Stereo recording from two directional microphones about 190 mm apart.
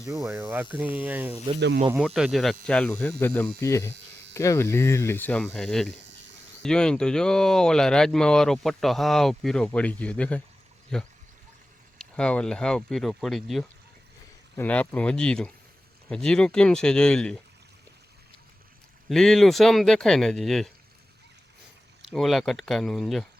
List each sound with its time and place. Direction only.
0.1 s speech: 5° right (ahead or behind)
1.5 s speech: 65° right (ahead or behind)
2.0 s speech: centre (ahead or behind)
19.0 s speech: centre (ahead or behind)
22.0 s speech: centre (ahead or behind)